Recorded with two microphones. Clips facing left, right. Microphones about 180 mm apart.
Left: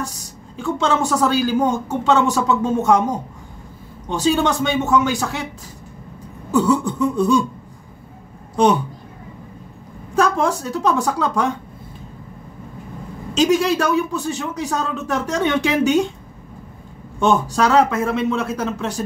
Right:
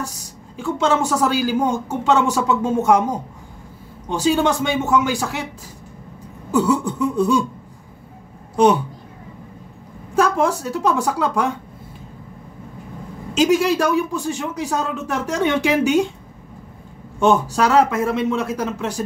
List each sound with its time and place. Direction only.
0.6 s speech: 10° right (ahead or behind)
4.1 s speech: 10° right (ahead or behind)
6.5 s speech: 10° right (ahead or behind)
8.6 s speech: 10° right (ahead or behind)
10.1 s speech: 10° right (ahead or behind)
13.3 s speech: 10° right (ahead or behind)
17.2 s speech: 10° right (ahead or behind)